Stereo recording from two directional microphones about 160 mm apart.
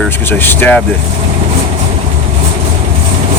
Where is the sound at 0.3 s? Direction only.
10° left (ahead or behind).